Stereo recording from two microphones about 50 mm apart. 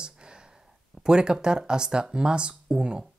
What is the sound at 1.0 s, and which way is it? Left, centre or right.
Speech, centre.